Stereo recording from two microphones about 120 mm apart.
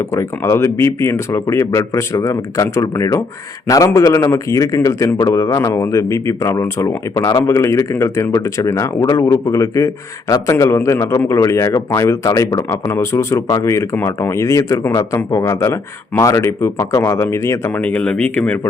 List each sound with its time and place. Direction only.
0.1 s speech: 25° left (ahead or behind)
17.7 s speech: 10° left (ahead or behind)